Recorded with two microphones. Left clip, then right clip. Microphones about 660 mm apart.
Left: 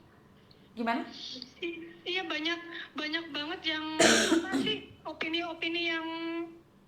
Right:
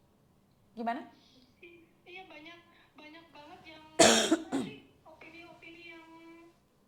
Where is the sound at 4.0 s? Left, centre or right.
Right.